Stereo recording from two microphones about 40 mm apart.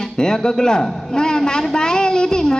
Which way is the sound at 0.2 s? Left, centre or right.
Centre.